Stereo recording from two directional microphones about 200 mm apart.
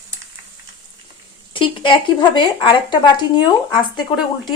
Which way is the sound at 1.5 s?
25° left (ahead or behind).